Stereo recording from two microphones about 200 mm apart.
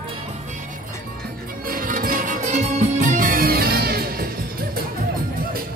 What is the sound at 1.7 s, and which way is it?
Music, 45° right (ahead or behind).